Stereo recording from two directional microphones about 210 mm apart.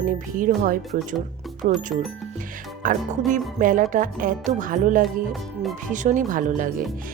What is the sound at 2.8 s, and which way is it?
Speech, 40° right (ahead or behind).